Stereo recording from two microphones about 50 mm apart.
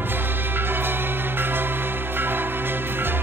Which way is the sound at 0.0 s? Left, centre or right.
Right.